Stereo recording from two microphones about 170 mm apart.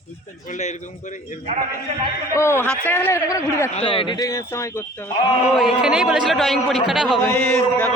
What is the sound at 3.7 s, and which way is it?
Speech, 30° left (ahead or behind).